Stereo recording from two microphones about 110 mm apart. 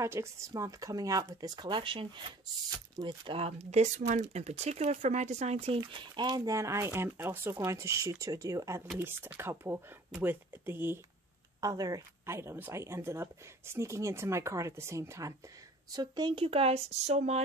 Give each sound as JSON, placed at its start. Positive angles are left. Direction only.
{"t": 0.0, "sound": "speech", "side_deg": -25}
{"t": 3.4, "sound": "speech", "side_deg": -90}
{"t": 11.6, "sound": "speech", "side_deg": -35}
{"t": 15.9, "sound": "speech", "side_deg": -40}
{"t": 16.4, "sound": "speech", "side_deg": -65}